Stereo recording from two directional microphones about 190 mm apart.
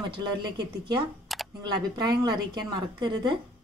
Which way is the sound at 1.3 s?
Centre (ahead or behind).